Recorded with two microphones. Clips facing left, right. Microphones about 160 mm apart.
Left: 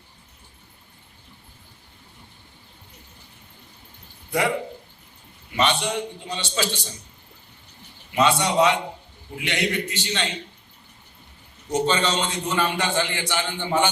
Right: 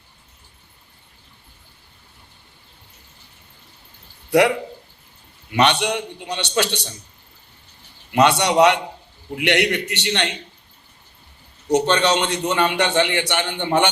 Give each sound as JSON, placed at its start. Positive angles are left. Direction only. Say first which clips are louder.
{"t": 4.3, "sound": "speech", "louder": "right 8 dB", "side_deg": -70}
{"t": 5.5, "sound": "a man's voice", "louder": "right 4 dB", "side_deg": -70}
{"t": 8.1, "sound": "a man's voice", "louder": "right 4 dB", "side_deg": -70}
{"t": 11.7, "sound": "a man's voice", "louder": "right 5 dB", "side_deg": -70}